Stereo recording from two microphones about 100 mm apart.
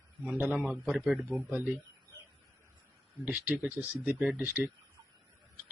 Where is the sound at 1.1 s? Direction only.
15° right (ahead or behind).